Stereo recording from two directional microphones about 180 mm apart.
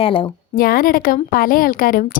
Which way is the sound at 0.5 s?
55° left (ahead or behind).